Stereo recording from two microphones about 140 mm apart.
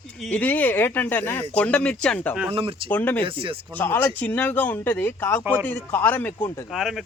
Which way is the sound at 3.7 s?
15° left (ahead or behind).